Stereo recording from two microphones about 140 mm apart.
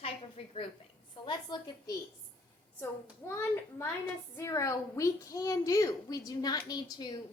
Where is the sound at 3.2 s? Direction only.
20° left (ahead or behind).